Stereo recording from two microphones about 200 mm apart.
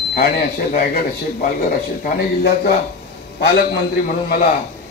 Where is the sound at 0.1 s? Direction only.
50° left (ahead or behind).